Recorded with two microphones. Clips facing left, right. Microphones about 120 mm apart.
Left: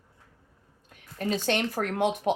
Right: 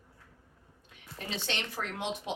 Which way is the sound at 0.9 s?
45° left (ahead or behind).